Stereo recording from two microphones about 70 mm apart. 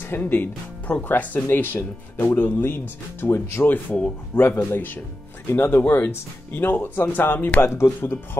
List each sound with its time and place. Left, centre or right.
0.0 s a man's voice: left
3.6 s a man's voice: left
7.6 s a man's voice: left